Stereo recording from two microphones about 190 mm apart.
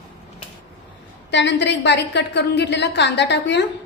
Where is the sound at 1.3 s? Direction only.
70° left (ahead or behind).